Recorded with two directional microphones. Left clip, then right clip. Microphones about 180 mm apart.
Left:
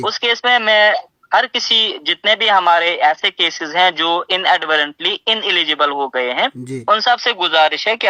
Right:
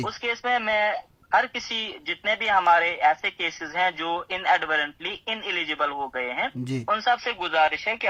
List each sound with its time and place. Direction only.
0.0 s speech: 40° left (ahead or behind)